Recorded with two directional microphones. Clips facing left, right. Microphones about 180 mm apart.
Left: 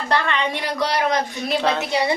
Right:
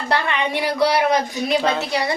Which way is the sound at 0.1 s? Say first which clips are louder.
Right 1 dB; 10° right (ahead or behind).